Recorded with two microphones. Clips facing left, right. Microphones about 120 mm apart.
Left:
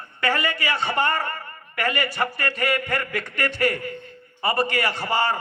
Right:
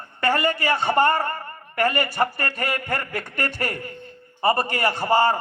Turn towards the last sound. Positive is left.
turn(degrees=-40)  # may be behind; listen again after turning